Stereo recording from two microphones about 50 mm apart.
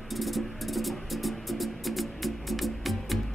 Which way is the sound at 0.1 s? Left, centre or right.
Centre.